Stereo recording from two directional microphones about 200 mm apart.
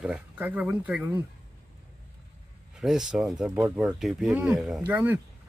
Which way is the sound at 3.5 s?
15° right (ahead or behind).